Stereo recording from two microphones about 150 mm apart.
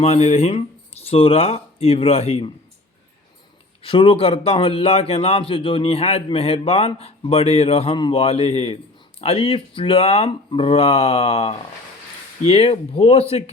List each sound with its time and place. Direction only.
0.0 s a man's voice: 50° left (ahead or behind)
3.8 s a man's voice: 35° left (ahead or behind)